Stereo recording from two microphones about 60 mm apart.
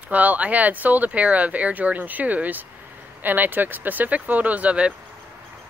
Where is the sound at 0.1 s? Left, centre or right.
Right.